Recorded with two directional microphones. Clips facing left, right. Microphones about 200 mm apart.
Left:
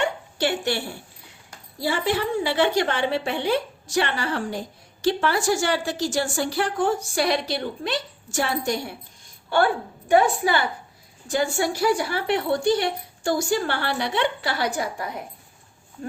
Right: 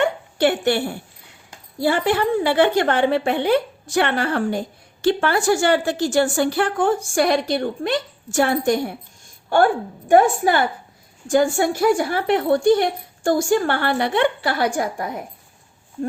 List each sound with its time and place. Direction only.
0.0 s a sound: 55° right (ahead or behind)
1.8 s a woman's voice: 55° right (ahead or behind)
10.1 s a woman's voice: 50° right (ahead or behind)